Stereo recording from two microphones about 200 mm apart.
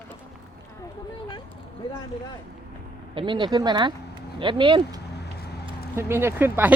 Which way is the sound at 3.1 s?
25° right (ahead or behind).